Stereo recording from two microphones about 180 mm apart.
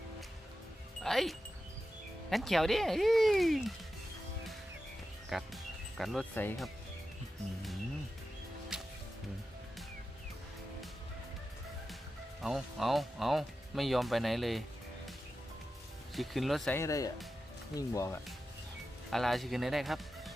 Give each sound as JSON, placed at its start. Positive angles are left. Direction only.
{"t": 1.0, "sound": "speech", "side_deg": 0}
{"t": 5.3, "sound": "speech", "side_deg": 0}
{"t": 6.3, "sound": "speech", "side_deg": 10}
{"t": 8.7, "sound": "music", "side_deg": -5}
{"t": 12.4, "sound": "speech", "side_deg": 0}
{"t": 16.1, "sound": "speech", "side_deg": 0}
{"t": 16.7, "sound": "speech", "side_deg": 15}
{"t": 19.1, "sound": "speech", "side_deg": 0}